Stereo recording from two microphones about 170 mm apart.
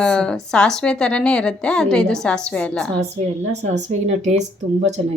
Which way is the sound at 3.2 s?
40° right (ahead or behind).